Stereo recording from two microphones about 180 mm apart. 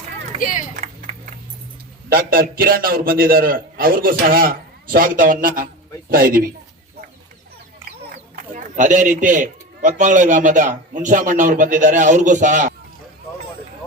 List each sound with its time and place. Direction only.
0.3 s speech: 45° left (ahead or behind)
0.8 s a sound: 45° right (ahead or behind)
2.0 s speech: 50° right (ahead or behind)
8.5 s speech: 45° right (ahead or behind)